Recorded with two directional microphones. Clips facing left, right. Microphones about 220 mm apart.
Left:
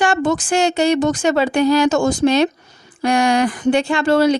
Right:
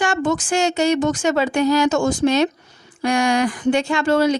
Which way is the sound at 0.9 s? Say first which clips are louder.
Left 2 dB; 35° left (ahead or behind).